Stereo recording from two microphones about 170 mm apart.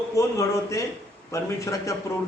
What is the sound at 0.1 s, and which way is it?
A man's voice, 20° left (ahead or behind).